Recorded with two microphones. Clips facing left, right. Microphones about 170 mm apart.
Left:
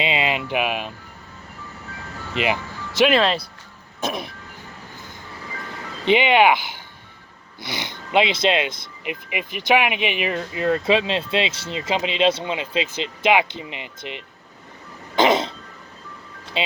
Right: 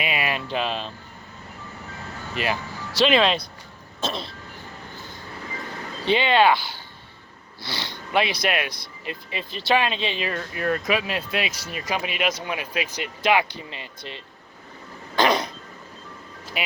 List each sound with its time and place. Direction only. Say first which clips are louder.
0.0 s speech: left 4 dB; 20° left (ahead or behind)
2.3 s speech: left 4 dB; 20° left (ahead or behind)
6.1 s speech: left 3 dB; 15° left (ahead or behind)
15.1 s throat clearing: left 3 dB; 20° left (ahead or behind)
16.6 s speech: left 5 dB; 25° left (ahead or behind)